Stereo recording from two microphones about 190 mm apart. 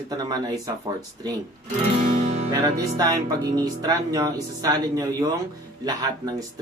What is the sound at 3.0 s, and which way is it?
Speech, 20° right (ahead or behind).